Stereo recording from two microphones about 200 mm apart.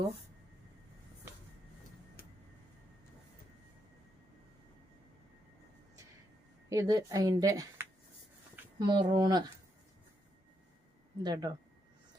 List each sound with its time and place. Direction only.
6.7 s speech: 15° right (ahead or behind)
8.9 s speech: 20° right (ahead or behind)
11.2 s speech: 20° right (ahead or behind)